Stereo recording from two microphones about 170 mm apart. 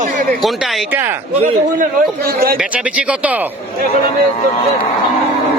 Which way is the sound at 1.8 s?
60° right (ahead or behind).